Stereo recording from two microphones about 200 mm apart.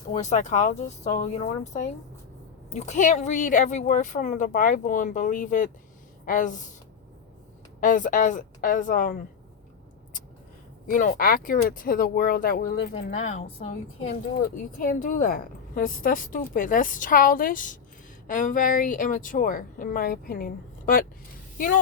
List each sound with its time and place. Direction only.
0.1 s speech: 35° left (ahead or behind)
7.8 s speech: 40° left (ahead or behind)
10.8 s speech: 45° left (ahead or behind)
12.9 s speech: 35° left (ahead or behind)
14.1 s speech: 50° left (ahead or behind)